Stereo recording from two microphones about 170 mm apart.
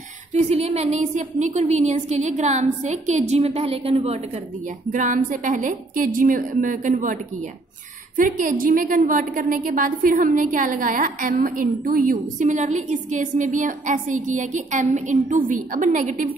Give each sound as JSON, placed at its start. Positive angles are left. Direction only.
{"t": 0.3, "sound": "a woman's voice", "side_deg": -40}
{"t": 4.9, "sound": "a woman's voice", "side_deg": -50}
{"t": 8.2, "sound": "a woman's voice", "side_deg": -50}